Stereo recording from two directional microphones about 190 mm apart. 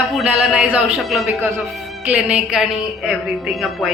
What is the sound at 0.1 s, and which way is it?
A woman's voice, centre (ahead or behind).